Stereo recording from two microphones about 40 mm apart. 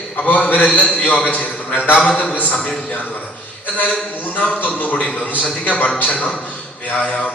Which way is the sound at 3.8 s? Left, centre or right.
Left.